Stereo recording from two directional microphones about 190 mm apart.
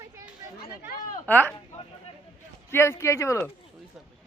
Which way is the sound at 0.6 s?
45° left (ahead or behind).